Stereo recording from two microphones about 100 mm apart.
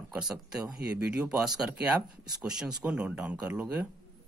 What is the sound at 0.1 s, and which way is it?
Speech, 10° right (ahead or behind).